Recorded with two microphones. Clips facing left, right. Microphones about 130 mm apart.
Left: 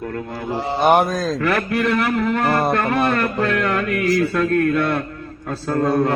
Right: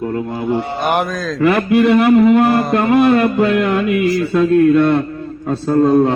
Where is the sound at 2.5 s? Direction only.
55° left (ahead or behind).